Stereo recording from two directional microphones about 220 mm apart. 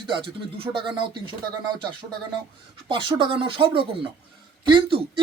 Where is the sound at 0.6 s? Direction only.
25° right (ahead or behind).